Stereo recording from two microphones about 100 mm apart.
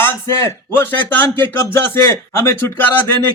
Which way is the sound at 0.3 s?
25° left (ahead or behind).